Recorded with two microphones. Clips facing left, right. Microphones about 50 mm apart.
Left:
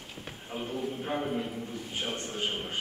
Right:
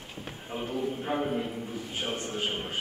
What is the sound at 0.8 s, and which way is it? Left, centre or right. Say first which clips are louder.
A man's voice: right 3 dB; centre.